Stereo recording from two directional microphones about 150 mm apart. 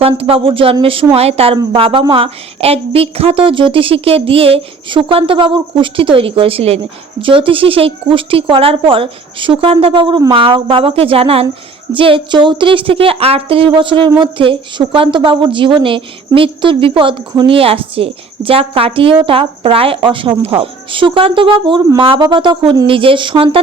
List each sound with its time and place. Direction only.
0.0 s a woman's voice: 40° right (ahead or behind)